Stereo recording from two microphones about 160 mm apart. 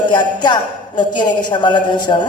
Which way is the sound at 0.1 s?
30° left (ahead or behind).